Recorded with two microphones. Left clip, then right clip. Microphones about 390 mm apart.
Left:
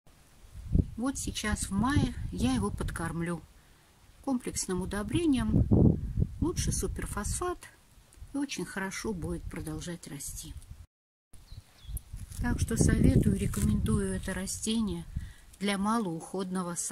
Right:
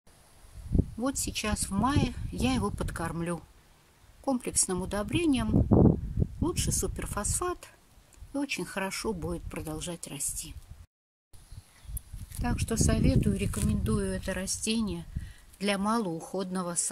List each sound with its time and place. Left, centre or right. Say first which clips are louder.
1.0 s speech: right 2 dB; centre
5.7 s a sound: right 4 dB; right
6.4 s speech: right 2 dB; centre
12.4 s speech: right 1 dB; centre